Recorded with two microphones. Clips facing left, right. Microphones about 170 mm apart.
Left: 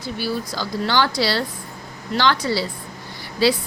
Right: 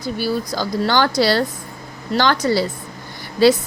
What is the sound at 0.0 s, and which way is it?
A woman's voice, 45° right (ahead or behind).